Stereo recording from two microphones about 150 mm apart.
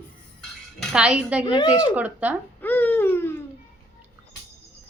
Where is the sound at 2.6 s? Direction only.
10° left (ahead or behind).